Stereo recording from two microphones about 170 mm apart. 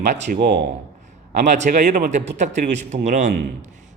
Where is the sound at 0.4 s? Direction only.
65° right (ahead or behind).